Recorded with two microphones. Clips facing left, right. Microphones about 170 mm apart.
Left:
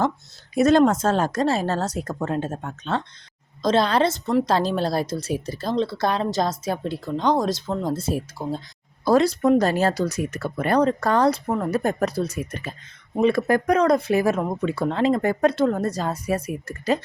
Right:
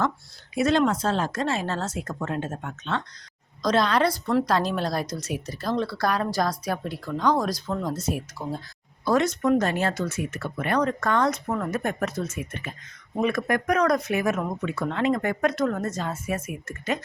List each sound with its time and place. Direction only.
0.5 s a woman's voice: 40° left (ahead or behind)